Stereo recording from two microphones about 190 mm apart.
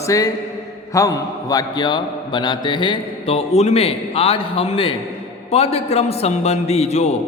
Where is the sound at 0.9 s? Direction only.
20° left (ahead or behind).